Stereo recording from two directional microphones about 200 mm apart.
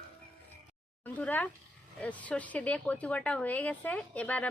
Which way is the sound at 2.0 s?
5° left (ahead or behind).